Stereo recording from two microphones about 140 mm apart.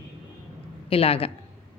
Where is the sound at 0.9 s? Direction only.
40° left (ahead or behind).